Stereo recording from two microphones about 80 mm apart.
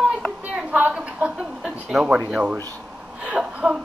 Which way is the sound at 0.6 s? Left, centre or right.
Centre.